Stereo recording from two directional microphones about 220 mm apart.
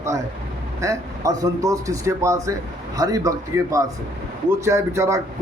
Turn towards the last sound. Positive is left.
turn(degrees=-15)  # may be behind; listen again after turning